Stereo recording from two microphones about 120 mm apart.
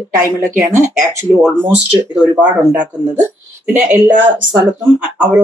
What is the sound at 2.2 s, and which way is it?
Speech, 10° right (ahead or behind).